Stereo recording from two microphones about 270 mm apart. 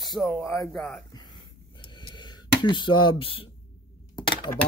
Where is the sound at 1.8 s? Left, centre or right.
Centre.